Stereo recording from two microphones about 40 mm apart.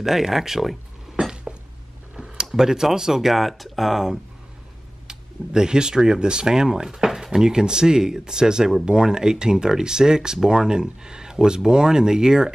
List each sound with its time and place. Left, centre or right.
0.0 s speech: centre
1.2 s a sound: right
2.5 s speech: centre
5.0 s speech: centre